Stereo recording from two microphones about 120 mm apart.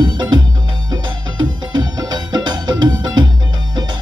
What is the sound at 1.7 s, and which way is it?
Music, 35° right (ahead or behind).